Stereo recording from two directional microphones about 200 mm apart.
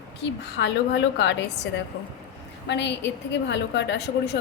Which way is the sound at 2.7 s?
60° left (ahead or behind).